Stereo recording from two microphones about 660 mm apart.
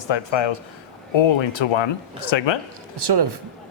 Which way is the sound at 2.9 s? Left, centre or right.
Right.